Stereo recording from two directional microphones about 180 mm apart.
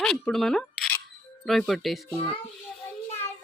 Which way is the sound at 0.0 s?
5° left (ahead or behind).